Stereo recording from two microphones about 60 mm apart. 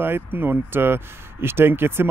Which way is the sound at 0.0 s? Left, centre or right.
Right.